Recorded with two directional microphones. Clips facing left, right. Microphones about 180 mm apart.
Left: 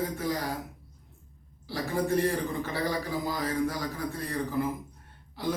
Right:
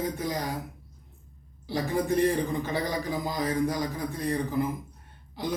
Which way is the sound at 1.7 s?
20° right (ahead or behind).